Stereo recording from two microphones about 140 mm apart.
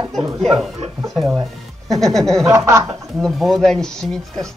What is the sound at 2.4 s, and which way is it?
Speech, 20° right (ahead or behind).